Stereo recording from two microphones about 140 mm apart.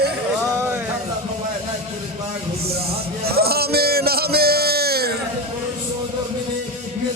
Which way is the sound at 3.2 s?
90° right.